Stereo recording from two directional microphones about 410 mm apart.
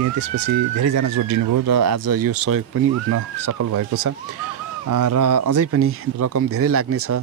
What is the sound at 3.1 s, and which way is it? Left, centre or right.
Speech, right.